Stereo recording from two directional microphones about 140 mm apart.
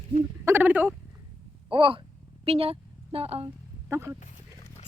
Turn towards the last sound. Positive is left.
turn(degrees=-20)  # may be behind; listen again after turning